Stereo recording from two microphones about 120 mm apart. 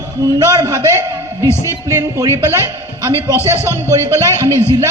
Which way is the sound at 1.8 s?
25° right (ahead or behind).